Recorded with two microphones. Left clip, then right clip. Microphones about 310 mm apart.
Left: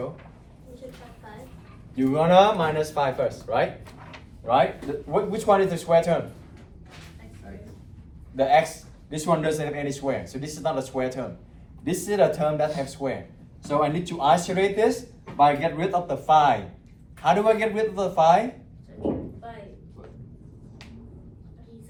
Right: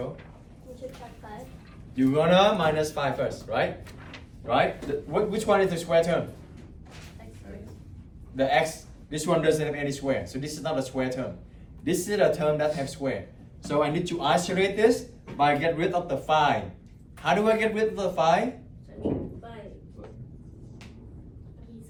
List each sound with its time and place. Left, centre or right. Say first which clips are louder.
2.0 s speech: left 3 dB; centre
8.4 s speech: left 4 dB; centre